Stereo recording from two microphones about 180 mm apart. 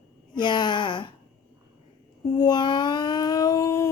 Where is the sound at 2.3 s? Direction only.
20° left (ahead or behind).